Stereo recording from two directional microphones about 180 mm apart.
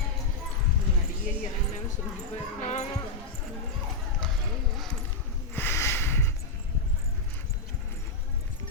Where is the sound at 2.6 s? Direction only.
40° left (ahead or behind).